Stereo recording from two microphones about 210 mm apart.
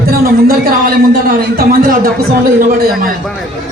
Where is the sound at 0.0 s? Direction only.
45° right (ahead or behind).